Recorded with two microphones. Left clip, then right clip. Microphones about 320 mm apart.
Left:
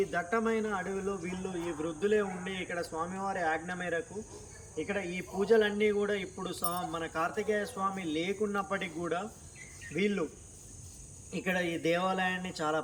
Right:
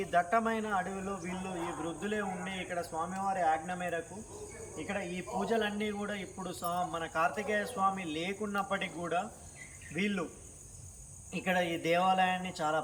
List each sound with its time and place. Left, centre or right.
0.0 s speech: centre
11.3 s speech: centre